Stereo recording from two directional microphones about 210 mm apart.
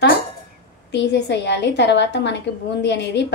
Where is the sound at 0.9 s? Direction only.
55° left (ahead or behind).